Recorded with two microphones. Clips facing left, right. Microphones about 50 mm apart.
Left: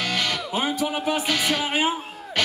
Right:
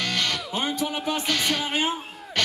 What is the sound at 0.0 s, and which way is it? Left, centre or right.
Music, centre.